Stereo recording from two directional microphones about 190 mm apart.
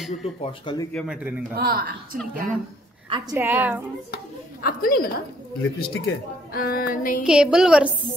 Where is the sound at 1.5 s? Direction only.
50° right (ahead or behind).